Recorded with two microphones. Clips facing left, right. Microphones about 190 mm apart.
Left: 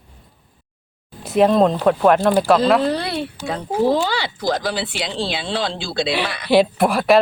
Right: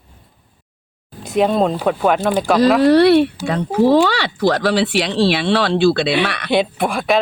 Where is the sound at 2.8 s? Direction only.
75° right (ahead or behind).